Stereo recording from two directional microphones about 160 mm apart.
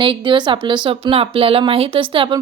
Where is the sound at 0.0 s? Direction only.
30° right (ahead or behind).